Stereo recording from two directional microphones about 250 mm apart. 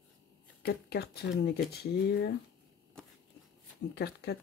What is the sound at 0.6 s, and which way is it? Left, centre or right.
Speech, left.